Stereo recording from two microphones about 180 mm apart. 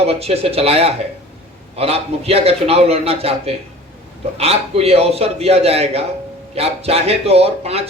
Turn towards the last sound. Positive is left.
turn(degrees=-35)  # may be behind; listen again after turning